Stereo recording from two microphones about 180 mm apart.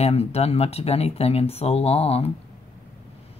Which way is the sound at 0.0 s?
35° left (ahead or behind).